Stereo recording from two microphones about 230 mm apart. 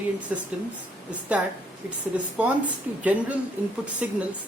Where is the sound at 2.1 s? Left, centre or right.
Centre.